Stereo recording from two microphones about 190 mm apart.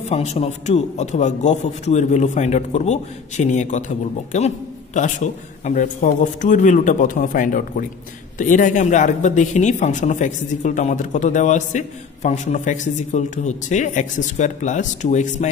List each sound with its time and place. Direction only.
0.1 s speech: 35° left (ahead or behind)